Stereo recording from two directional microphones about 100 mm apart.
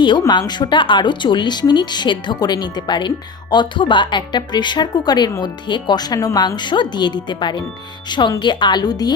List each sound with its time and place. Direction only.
0.2 s speech: 45° left (ahead or behind)